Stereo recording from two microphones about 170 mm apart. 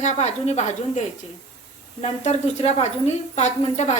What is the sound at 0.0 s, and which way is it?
A woman's voice, 40° left (ahead or behind).